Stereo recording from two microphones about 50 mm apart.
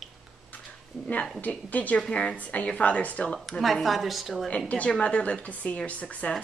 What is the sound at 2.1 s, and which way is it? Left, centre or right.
Speech, centre.